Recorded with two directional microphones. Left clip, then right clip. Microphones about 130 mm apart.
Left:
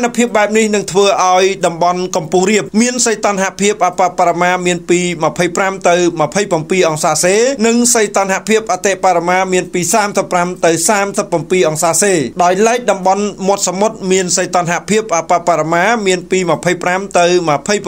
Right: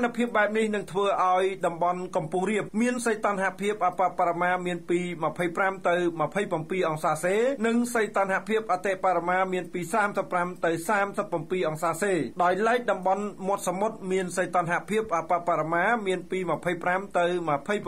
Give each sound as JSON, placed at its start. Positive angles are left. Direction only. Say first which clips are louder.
{"t": 0.0, "sound": "speech", "louder": "left 12 dB", "side_deg": 40}
{"t": 14.1, "sound": "speech", "louder": "left 11 dB", "side_deg": 50}